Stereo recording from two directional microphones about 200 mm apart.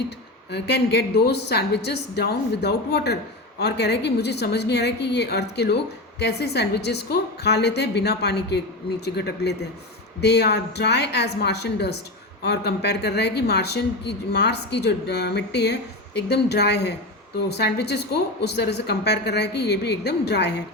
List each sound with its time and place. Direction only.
0.5 s a woman's voice: 55° left (ahead or behind)